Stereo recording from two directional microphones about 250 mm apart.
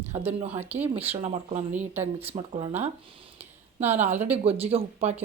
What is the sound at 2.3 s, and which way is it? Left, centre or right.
Speech, right.